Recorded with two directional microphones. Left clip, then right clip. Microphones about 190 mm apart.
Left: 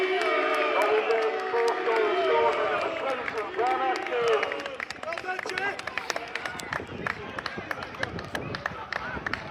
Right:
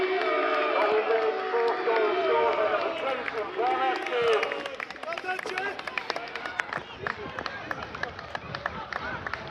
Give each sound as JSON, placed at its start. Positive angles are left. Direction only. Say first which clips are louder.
{"t": 0.2, "sound": "music", "louder": "left 1 dB", "side_deg": 90}
{"t": 3.6, "sound": "run", "louder": "even", "side_deg": 30}
{"t": 4.0, "sound": "a sound", "louder": "even", "side_deg": 30}
{"t": 8.6, "sound": "run", "louder": "even", "side_deg": 85}